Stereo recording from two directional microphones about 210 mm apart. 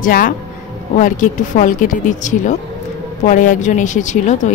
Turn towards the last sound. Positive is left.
turn(degrees=35)  # may be behind; listen again after turning